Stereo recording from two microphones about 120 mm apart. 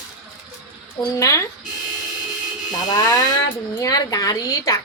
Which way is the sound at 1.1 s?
25° left (ahead or behind).